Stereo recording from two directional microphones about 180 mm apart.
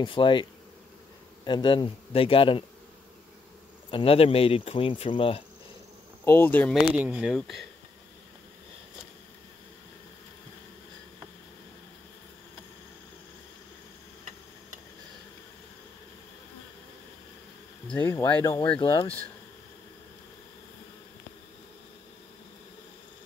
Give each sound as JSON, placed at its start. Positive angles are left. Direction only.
{"t": 0.0, "sound": "a man's voice", "side_deg": 30}
{"t": 3.9, "sound": "speech", "side_deg": 30}
{"t": 6.2, "sound": "speech", "side_deg": 10}
{"t": 7.0, "sound": "speech", "side_deg": -5}
{"t": 17.8, "sound": "speech", "side_deg": 10}
{"t": 18.8, "sound": "a man's voice", "side_deg": 25}